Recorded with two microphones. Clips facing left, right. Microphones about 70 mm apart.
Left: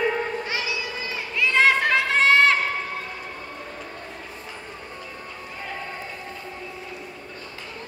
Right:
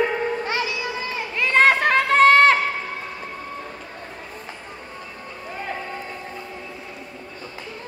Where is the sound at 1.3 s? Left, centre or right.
Right.